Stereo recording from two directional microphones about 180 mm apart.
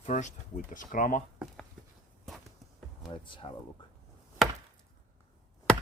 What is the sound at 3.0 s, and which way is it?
Speech, 25° left (ahead or behind).